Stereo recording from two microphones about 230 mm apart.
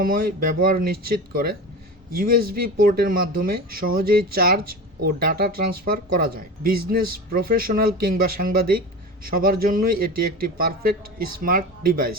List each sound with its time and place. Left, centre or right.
0.0 s speech: right